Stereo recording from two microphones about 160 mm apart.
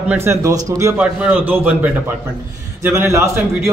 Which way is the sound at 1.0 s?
10° right (ahead or behind).